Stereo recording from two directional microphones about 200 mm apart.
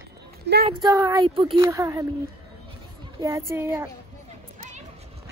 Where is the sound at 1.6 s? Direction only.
15° right (ahead or behind).